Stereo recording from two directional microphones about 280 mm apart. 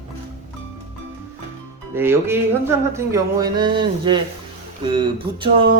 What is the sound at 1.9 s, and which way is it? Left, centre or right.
Speech, centre.